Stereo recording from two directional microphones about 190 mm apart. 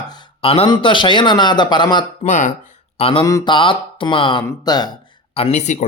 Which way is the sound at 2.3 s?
40° left (ahead or behind).